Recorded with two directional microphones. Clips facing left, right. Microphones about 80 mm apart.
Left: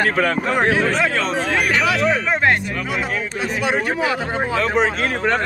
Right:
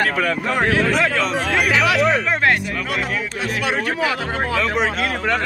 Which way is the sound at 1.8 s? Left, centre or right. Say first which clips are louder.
Right 3 dB; centre.